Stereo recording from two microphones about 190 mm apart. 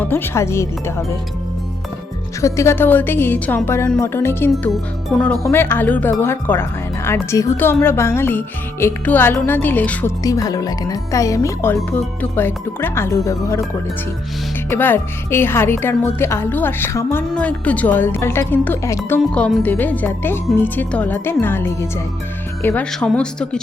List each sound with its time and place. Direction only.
0.0 s a woman's voice: 10° left (ahead or behind)
2.4 s a woman's voice: 15° left (ahead or behind)
4.5 s a woman's voice: centre (ahead or behind)
14.7 s a woman's voice: 10° left (ahead or behind)